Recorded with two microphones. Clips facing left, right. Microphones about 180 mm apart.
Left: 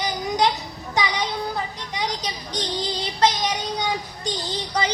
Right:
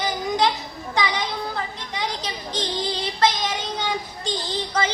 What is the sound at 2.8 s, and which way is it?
Child singing, 20° left (ahead or behind).